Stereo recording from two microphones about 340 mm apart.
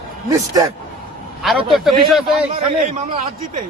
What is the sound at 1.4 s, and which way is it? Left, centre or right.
Speech, centre.